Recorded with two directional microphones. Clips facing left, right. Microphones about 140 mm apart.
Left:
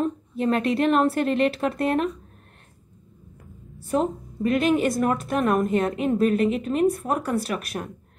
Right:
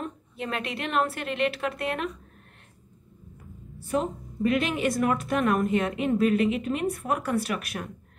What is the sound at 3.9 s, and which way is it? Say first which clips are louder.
A woman's voice: left 4 dB; 40° left (ahead or behind).